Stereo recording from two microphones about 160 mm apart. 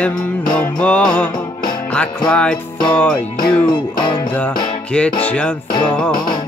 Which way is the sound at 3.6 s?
30° left (ahead or behind).